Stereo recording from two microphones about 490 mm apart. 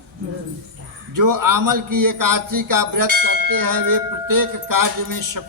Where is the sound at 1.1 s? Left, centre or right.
Right.